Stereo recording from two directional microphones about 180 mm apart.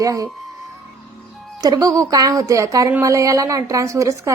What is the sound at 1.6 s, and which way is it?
A woman's voice, 20° right (ahead or behind).